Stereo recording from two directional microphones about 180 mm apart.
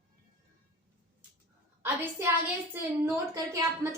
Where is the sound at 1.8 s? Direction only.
15° right (ahead or behind).